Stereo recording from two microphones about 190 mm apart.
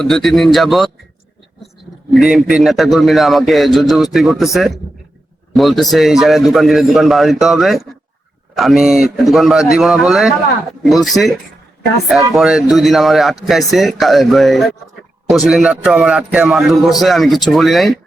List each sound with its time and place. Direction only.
0.0 s a man's voice: centre (ahead or behind)
2.1 s a man's voice: 5° right (ahead or behind)